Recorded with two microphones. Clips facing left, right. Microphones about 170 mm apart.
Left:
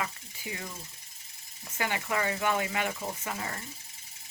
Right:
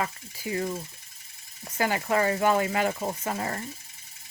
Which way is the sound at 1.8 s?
40° right (ahead or behind).